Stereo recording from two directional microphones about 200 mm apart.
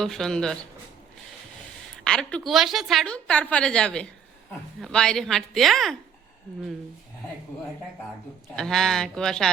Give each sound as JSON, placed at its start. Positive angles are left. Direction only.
{"t": 0.0, "sound": "a woman's voice", "side_deg": 0}
{"t": 2.0, "sound": "a woman's voice", "side_deg": 5}
{"t": 8.5, "sound": "a woman's voice", "side_deg": 0}